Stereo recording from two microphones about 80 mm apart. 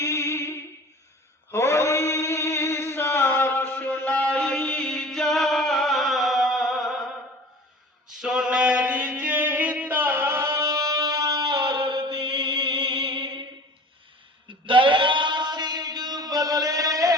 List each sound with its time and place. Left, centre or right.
0.0 s music: left
1.5 s chant: left; by 7.1 s centre
8.2 s mantra: centre; by 10.7 s right
10.7 s music: right
14.7 s chant: right